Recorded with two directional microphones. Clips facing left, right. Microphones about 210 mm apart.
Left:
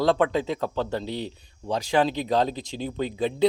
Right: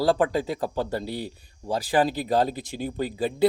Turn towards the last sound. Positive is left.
turn(degrees=-5)  # may be behind; listen again after turning